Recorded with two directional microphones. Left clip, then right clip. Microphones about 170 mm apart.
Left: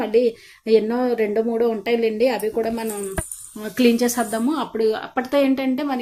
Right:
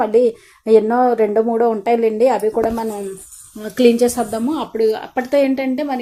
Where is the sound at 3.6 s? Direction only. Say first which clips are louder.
Right 5 dB; centre (ahead or behind).